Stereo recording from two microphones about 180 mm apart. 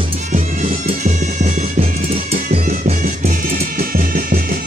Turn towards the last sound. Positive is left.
turn(degrees=-55)  # may be behind; listen again after turning